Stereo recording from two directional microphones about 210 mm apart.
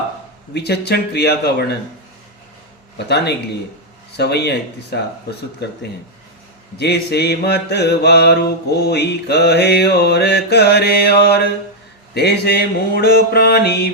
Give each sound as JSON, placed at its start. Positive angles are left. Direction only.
{"t": 0.5, "sound": "mantra", "side_deg": 50}
{"t": 3.1, "sound": "mantra", "side_deg": 50}